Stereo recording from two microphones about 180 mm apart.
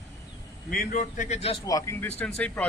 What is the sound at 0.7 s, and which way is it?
Speech, 50° left (ahead or behind).